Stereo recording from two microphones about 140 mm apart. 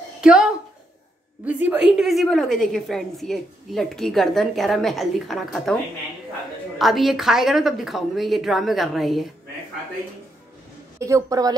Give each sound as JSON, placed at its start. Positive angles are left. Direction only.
{"t": 0.2, "sound": "speech", "side_deg": -5}
{"t": 1.7, "sound": "a woman's voice", "side_deg": -5}
{"t": 6.8, "sound": "a woman's voice", "side_deg": 0}
{"t": 11.0, "sound": "a woman's voice", "side_deg": -20}